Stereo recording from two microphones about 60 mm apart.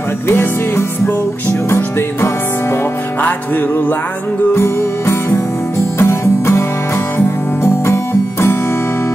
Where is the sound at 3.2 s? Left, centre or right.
Left.